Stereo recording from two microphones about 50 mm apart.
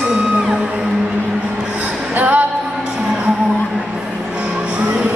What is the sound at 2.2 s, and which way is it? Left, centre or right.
Music, right.